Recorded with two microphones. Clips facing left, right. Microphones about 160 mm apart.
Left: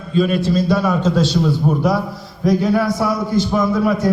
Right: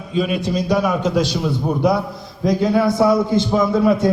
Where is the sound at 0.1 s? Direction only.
15° right (ahead or behind).